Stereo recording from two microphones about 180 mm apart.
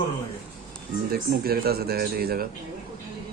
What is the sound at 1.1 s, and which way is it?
Speech, 60° right (ahead or behind).